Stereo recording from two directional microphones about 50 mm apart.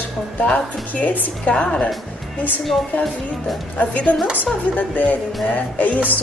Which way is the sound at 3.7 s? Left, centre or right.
Left.